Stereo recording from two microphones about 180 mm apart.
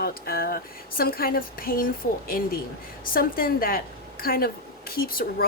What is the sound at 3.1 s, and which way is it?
A woman's voice, 55° left (ahead or behind).